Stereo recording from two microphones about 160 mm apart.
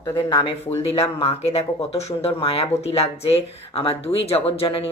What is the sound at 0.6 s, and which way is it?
Speech, 40° left (ahead or behind).